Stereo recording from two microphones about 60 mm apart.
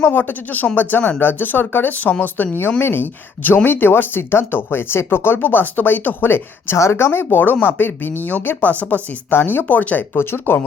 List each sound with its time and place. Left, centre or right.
0.1 s speech: left
6.7 s speech: left